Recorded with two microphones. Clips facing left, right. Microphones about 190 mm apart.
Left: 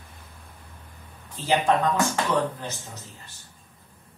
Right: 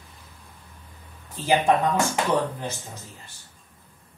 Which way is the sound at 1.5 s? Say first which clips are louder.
Right 1 dB; 15° right (ahead or behind).